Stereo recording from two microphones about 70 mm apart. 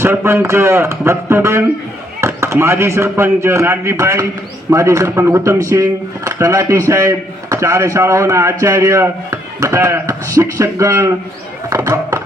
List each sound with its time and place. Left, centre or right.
0.0 s speech: right